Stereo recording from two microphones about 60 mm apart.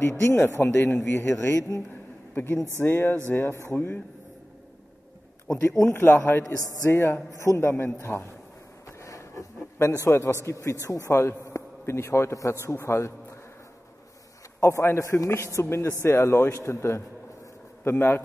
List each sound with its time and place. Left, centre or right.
0.3 s a man's voice: left
1.9 s a sound: left
2.8 s a man's voice: left
5.6 s a man's voice: left
8.8 s a sound: left
10.4 s speech: left
11.1 s a man's voice: left
14.6 s a man's voice: left
17.8 s a man's voice: left